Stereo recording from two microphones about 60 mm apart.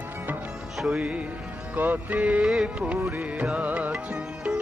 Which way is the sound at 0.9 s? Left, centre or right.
Centre.